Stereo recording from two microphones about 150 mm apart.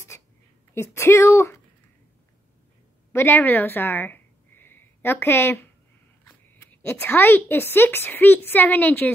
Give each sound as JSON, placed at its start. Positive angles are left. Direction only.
{"t": 0.7, "sound": "speech", "side_deg": 15}
{"t": 3.1, "sound": "a woman's voice", "side_deg": 15}